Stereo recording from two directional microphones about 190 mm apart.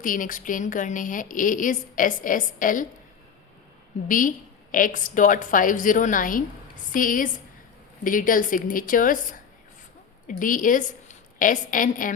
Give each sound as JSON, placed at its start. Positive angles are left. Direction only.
{"t": 0.0, "sound": "a woman's voice", "side_deg": 45}
{"t": 4.1, "sound": "a woman's voice", "side_deg": 45}